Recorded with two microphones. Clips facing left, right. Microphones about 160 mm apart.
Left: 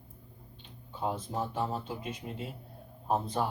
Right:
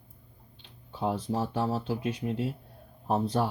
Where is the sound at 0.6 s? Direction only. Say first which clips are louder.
Right 3 dB; 80° right.